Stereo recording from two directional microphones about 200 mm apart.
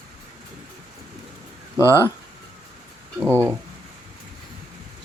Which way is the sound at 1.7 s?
15° right (ahead or behind).